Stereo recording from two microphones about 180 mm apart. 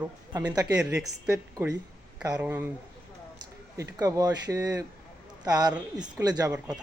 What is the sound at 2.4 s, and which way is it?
Speech, 10° right (ahead or behind).